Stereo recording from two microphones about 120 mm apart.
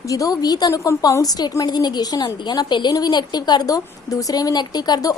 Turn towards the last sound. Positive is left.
turn(degrees=35)  # may be behind; listen again after turning